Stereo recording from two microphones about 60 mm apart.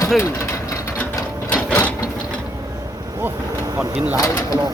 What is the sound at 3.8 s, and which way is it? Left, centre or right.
Speech, right.